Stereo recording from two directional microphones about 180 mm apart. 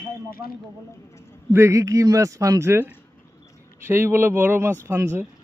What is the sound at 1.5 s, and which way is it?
Speech, 15° right (ahead or behind).